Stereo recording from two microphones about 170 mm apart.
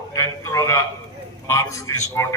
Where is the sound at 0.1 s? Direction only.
20° left (ahead or behind).